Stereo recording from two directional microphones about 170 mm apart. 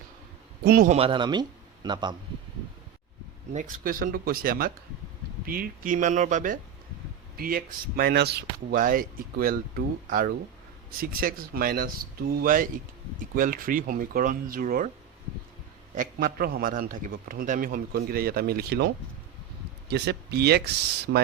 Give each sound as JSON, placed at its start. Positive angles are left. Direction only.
{"t": 0.6, "sound": "speech", "side_deg": -65}
{"t": 0.9, "sound": "speech", "side_deg": -35}
{"t": 3.5, "sound": "speech", "side_deg": -50}
{"t": 16.0, "sound": "speech", "side_deg": -60}
{"t": 19.9, "sound": "speech", "side_deg": -75}